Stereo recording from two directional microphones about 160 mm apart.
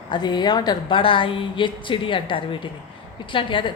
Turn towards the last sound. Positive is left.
turn(degrees=30)  # may be behind; listen again after turning